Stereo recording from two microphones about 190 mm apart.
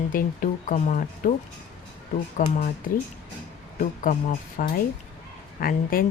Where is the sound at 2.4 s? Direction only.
45° left (ahead or behind).